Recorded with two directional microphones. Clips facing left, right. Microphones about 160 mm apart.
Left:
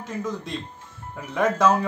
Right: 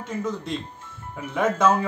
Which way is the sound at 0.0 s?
Centre (ahead or behind).